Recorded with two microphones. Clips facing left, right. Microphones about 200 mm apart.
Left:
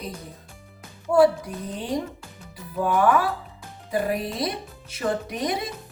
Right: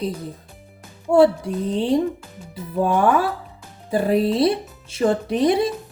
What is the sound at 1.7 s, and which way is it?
Speech, 30° right (ahead or behind).